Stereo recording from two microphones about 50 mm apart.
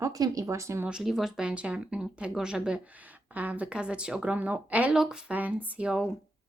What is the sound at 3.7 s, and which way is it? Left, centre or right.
Speech, centre.